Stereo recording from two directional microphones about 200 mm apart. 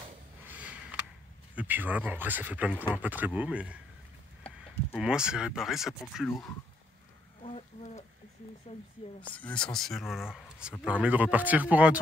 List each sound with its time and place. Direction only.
0.5 s sniff: 5° right (ahead or behind)
1.5 s speech: 10° right (ahead or behind)
4.9 s speech: 5° right (ahead or behind)
7.4 s a sound: 30° left (ahead or behind)
9.2 s speech: 5° left (ahead or behind)